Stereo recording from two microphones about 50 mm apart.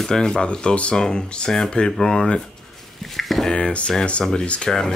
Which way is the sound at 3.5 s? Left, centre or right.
Centre.